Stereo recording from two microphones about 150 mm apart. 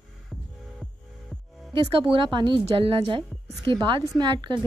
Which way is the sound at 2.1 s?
35° right (ahead or behind).